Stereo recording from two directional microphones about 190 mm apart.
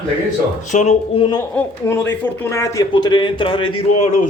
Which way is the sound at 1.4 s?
15° left (ahead or behind).